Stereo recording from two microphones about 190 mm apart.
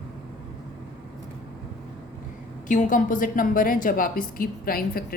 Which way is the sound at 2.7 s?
45° left (ahead or behind).